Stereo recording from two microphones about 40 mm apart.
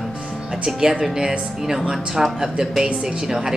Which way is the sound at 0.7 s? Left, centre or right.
Centre.